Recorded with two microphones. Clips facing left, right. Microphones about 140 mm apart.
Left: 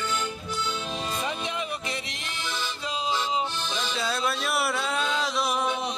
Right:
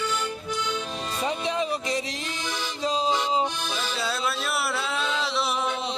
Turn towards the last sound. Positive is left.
turn(degrees=0)  # may be behind; listen again after turning